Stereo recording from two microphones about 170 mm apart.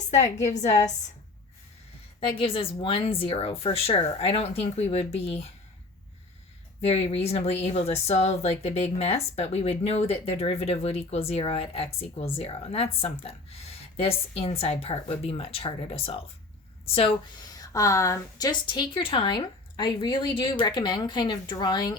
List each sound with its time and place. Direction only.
0.1 s speech: 40° left (ahead or behind)
0.7 s a woman's voice: 20° left (ahead or behind)
2.4 s speech: 30° left (ahead or behind)
6.8 s a woman's voice: 35° left (ahead or behind)